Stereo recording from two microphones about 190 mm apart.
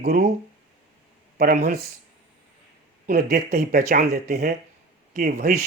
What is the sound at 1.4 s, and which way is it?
Speech, 55° right (ahead or behind).